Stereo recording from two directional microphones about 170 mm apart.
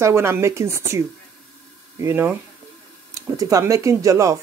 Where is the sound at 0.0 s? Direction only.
15° right (ahead or behind).